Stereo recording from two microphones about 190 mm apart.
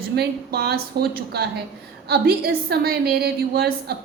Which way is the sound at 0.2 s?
55° right (ahead or behind).